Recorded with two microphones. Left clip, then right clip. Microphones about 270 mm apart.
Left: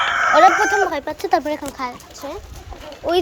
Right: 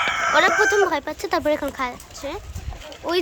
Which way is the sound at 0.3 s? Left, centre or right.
Centre.